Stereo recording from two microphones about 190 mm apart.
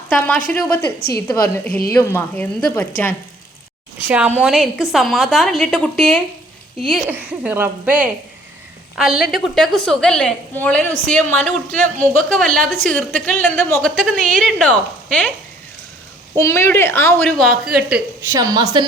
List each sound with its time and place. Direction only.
0.1 s a woman's voice: 5° left (ahead or behind)
0.9 s a woman's voice: 55° left (ahead or behind)
1.5 s a woman's voice: 10° left (ahead or behind)
4.0 s a woman's voice: 5° right (ahead or behind)
16.4 s a woman's voice: 15° left (ahead or behind)
17.4 s a woman's voice: 5° right (ahead or behind)
18.3 s a woman's voice: 20° right (ahead or behind)